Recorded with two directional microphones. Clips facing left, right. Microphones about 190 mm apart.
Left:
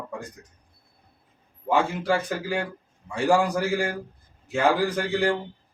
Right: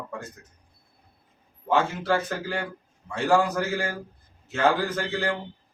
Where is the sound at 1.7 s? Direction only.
15° left (ahead or behind).